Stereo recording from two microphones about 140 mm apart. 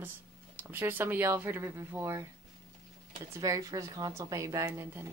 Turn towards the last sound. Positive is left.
turn(degrees=-20)  # may be behind; listen again after turning